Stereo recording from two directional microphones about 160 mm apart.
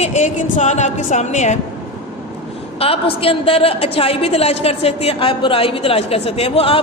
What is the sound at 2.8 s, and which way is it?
A woman's voice, 35° left (ahead or behind).